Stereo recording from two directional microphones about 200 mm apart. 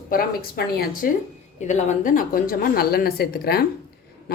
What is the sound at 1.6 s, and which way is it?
Speech, 35° left (ahead or behind).